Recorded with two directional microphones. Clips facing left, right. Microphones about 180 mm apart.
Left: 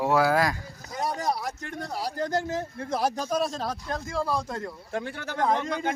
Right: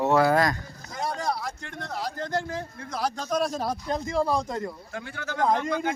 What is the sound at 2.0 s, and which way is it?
Speech, 40° left (ahead or behind).